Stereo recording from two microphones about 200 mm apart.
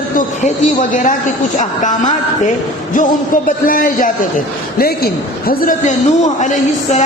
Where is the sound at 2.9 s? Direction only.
40° left (ahead or behind).